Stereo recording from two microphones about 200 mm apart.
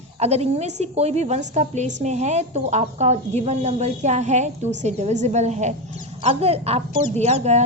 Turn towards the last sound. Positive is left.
turn(degrees=-35)  # may be behind; listen again after turning